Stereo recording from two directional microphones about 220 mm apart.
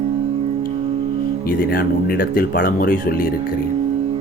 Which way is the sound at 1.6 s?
40° left (ahead or behind).